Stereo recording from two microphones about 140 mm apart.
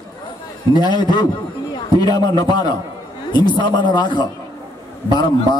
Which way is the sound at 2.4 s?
30° left (ahead or behind).